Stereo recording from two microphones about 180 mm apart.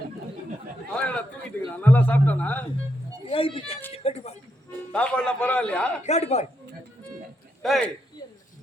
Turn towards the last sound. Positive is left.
turn(degrees=0)  # may be behind; listen again after turning